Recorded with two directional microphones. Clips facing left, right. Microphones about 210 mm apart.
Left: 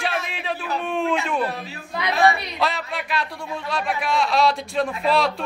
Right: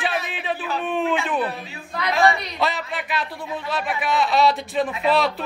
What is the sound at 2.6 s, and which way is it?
A man's voice, centre (ahead or behind).